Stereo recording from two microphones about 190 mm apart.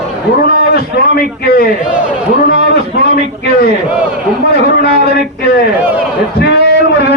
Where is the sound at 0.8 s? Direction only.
55° left (ahead or behind).